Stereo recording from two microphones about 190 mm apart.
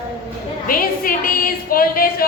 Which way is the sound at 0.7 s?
50° left (ahead or behind).